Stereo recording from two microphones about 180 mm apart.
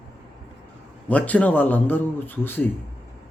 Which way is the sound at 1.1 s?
10° left (ahead or behind).